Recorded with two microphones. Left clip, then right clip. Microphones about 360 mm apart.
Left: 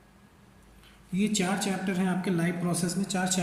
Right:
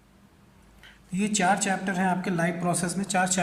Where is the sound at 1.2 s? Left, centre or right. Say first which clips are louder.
Right 5 dB; centre.